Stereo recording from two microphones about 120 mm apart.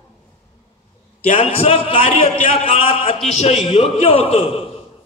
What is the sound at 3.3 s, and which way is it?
A man's voice, 65° left (ahead or behind).